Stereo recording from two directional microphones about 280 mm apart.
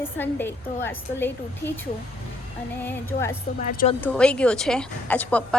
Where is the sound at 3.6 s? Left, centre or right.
Left.